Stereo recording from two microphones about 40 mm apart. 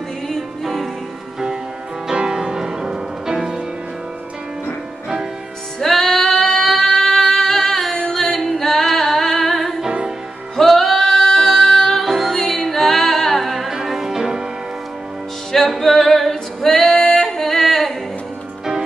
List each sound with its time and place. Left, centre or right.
2.0 s music: centre
5.8 s female singing: centre
8.1 s singing: centre
10.5 s music: centre
15.8 s female singing: centre